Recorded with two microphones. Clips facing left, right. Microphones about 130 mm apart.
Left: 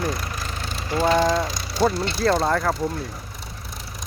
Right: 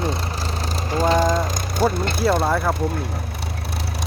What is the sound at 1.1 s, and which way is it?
Speech, 45° right (ahead or behind).